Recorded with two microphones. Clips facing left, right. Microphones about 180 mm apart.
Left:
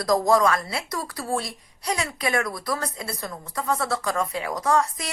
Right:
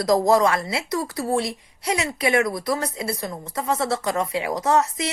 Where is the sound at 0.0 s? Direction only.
25° right (ahead or behind).